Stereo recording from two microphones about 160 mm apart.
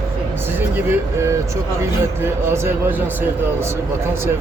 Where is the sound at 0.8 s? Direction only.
15° right (ahead or behind).